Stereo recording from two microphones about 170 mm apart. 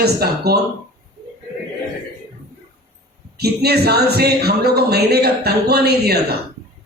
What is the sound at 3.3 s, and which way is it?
Speech, 70° right (ahead or behind).